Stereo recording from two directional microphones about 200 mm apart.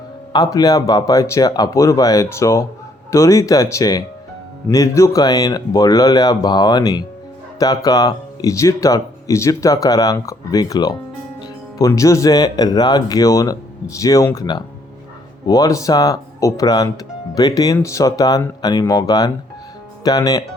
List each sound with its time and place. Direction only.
0.3 s speech: 20° left (ahead or behind)